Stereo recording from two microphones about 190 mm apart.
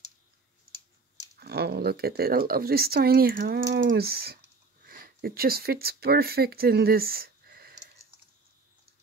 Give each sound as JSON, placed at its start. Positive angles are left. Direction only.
{"t": 1.4, "sound": "speech", "side_deg": -55}